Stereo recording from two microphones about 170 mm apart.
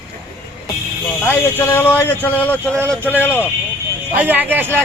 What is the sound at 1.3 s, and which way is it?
A man's voice, 10° left (ahead or behind).